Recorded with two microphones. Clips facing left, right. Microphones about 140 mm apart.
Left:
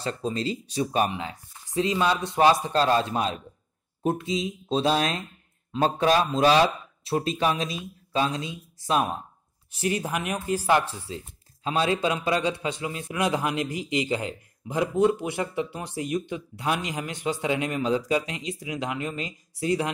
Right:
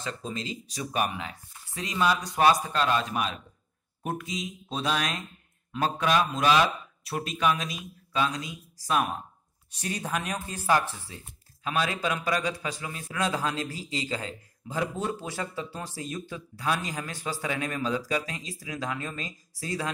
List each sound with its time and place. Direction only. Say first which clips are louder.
0.0 s speech: left 6 dB; 35° left (ahead or behind)
10.1 s speech: left 5 dB; 15° left (ahead or behind)